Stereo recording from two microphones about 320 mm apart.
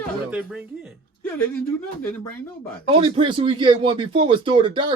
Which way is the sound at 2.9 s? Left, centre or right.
Centre.